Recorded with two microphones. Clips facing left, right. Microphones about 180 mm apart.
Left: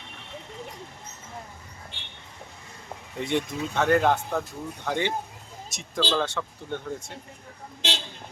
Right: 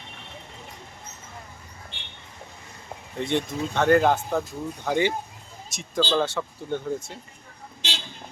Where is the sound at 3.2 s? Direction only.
10° left (ahead or behind).